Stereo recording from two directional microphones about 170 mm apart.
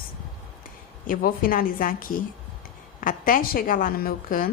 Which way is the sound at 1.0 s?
55° left (ahead or behind).